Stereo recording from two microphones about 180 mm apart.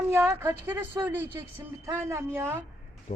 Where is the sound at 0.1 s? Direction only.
15° right (ahead or behind).